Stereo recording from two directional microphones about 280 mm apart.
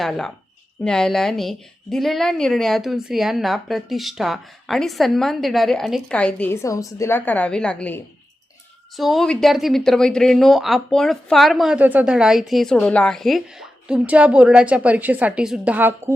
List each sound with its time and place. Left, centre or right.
0.0 s speech: centre